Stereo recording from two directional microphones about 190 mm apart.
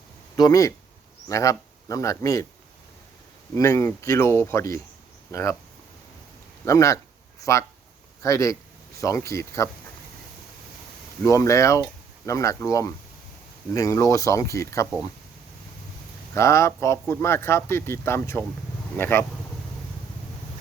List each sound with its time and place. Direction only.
0.3 s speech: 20° left (ahead or behind)
3.5 s speech: 15° left (ahead or behind)
6.7 s speech: 15° left (ahead or behind)
11.2 s speech: 15° left (ahead or behind)
16.3 s speech: 15° left (ahead or behind)